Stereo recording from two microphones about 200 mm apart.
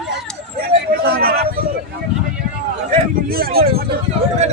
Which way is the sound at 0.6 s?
50° right (ahead or behind).